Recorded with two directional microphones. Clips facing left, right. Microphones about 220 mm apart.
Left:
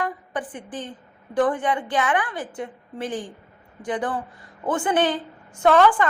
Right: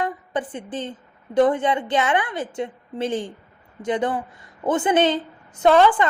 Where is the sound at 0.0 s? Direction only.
25° right (ahead or behind).